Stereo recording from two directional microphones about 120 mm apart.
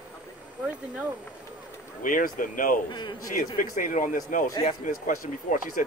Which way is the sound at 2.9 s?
40° left (ahead or behind).